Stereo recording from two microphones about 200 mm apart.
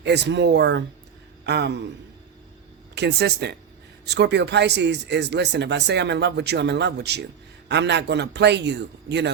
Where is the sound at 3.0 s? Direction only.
55° right (ahead or behind).